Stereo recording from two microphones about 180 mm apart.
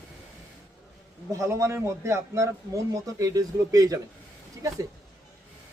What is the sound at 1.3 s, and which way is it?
A man's voice, 15° right (ahead or behind).